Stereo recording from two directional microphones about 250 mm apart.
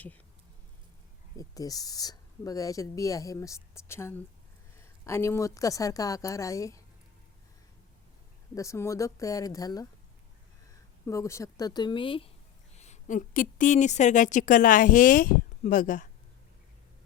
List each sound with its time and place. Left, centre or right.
1.4 s speech: centre
8.5 s speech: centre
11.0 s a woman's voice: centre; by 16.0 s left